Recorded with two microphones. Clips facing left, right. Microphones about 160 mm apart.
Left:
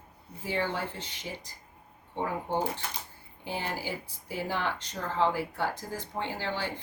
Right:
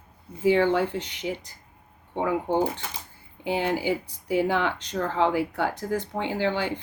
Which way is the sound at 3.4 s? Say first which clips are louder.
Right 9 dB; 70° right (ahead or behind).